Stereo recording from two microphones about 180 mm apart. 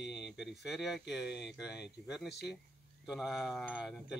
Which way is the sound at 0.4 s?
Centre (ahead or behind).